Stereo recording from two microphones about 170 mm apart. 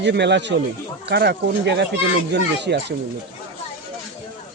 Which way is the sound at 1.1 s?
70° right (ahead or behind).